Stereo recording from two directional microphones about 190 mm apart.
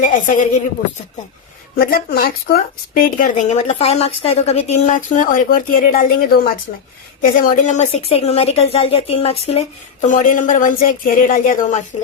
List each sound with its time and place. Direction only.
0.0 s a woman's voice: 45° left (ahead or behind)
1.7 s a woman's voice: 50° left (ahead or behind)